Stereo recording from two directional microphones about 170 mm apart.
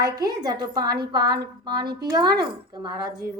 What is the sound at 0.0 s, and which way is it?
A woman's voice, 25° right (ahead or behind).